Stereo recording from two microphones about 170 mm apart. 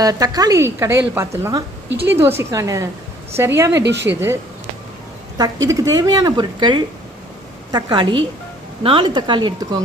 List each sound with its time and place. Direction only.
0.0 s a woman's voice: 20° right (ahead or behind)
3.8 s a woman's voice: 90° right
4.1 s a woman's voice: 15° right (ahead or behind)
5.4 s a woman's voice: 20° right (ahead or behind)